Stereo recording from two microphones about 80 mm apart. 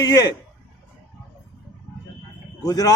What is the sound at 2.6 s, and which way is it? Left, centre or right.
Speech, left.